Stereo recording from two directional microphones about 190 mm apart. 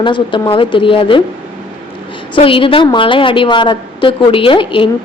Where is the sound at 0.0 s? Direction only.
25° left (ahead or behind).